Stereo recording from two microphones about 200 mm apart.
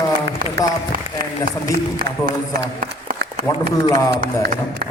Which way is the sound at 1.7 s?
45° right (ahead or behind).